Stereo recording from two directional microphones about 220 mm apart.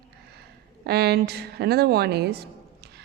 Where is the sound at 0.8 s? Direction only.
45° right (ahead or behind).